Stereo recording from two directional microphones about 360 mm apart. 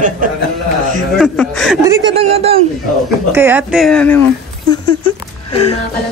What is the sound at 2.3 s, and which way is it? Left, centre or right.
Speech, centre.